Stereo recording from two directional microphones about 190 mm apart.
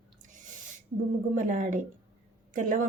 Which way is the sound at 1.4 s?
40° right (ahead or behind).